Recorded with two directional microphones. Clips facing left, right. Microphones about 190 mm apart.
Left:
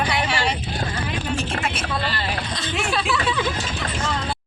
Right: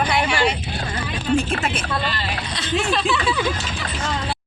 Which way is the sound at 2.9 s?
Centre (ahead or behind).